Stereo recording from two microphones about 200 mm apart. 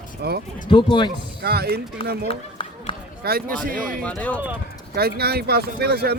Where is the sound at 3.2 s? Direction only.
50° right (ahead or behind).